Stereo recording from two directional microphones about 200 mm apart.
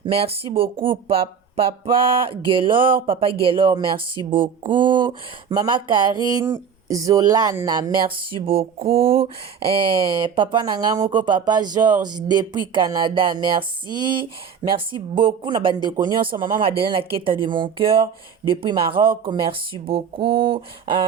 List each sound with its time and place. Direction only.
0.0 s speech: 25° right (ahead or behind)